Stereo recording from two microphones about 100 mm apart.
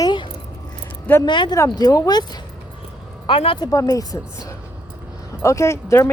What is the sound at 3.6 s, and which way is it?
Speech, 35° left (ahead or behind).